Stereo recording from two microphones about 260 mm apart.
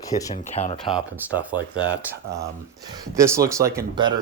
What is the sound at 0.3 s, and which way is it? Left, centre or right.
Speech, left.